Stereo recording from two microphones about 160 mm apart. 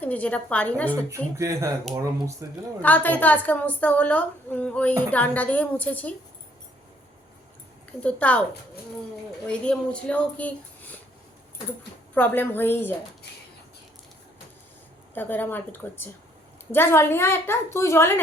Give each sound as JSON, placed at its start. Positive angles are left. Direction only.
{"t": 0.0, "sound": "a woman's voice", "side_deg": 10}
{"t": 1.4, "sound": "speech", "side_deg": -20}
{"t": 2.8, "sound": "a woman's voice", "side_deg": 10}
{"t": 8.0, "sound": "a woman's voice", "side_deg": 5}
{"t": 9.5, "sound": "a woman's voice", "side_deg": 5}
{"t": 12.1, "sound": "a woman's voice", "side_deg": 10}
{"t": 15.1, "sound": "a woman's voice", "side_deg": 10}